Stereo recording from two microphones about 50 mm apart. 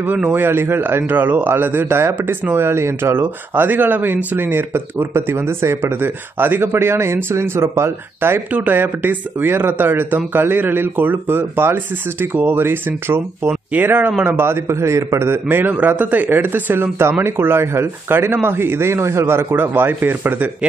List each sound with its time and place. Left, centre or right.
0.0 s speech: right
6.6 s speech: right
8.6 s speech: right
14.2 s speech: right
15.4 s speech: right
17.2 s speech: right